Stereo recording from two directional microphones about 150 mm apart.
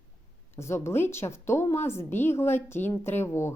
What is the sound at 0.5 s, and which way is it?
A woman's voice, 15° left (ahead or behind).